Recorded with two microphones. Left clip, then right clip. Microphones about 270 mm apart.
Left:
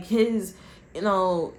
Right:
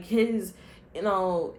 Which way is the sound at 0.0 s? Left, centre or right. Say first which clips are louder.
Left 2 dB; left.